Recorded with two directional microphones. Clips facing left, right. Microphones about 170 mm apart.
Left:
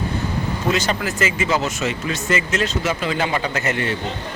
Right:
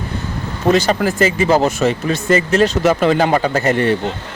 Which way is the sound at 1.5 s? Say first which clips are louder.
Right 9 dB; 55° right (ahead or behind).